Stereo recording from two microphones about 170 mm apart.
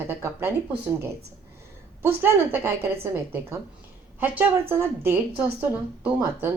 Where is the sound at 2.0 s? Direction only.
10° right (ahead or behind).